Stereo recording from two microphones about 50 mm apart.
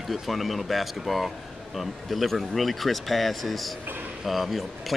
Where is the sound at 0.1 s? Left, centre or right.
Centre.